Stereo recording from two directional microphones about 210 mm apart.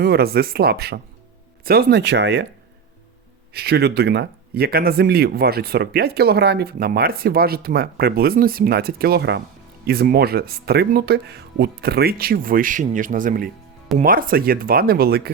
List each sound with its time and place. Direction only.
0.0 s speech: 50° right (ahead or behind)
3.5 s speech: 50° right (ahead or behind)